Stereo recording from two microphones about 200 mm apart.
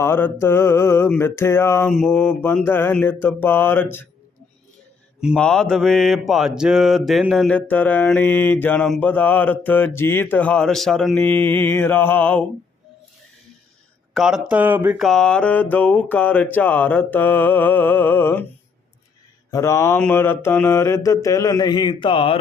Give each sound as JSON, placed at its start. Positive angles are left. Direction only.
{"t": 0.0, "sound": "mantra", "side_deg": 10}
{"t": 5.2, "sound": "mantra", "side_deg": 0}
{"t": 14.1, "sound": "mantra", "side_deg": 0}
{"t": 19.5, "sound": "mantra", "side_deg": 15}